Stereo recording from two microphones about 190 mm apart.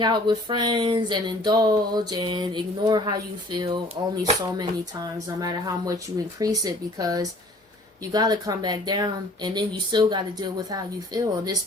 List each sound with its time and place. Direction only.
0.0 s speech: 25° right (ahead or behind)
4.2 s speech: 20° right (ahead or behind)